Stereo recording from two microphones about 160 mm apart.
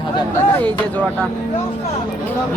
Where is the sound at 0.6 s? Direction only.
10° left (ahead or behind).